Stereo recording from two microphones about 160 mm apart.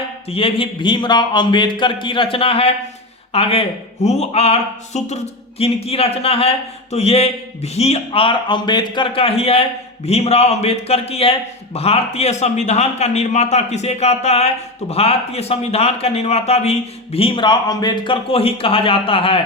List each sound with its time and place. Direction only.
0.3 s a man's voice: 35° left (ahead or behind)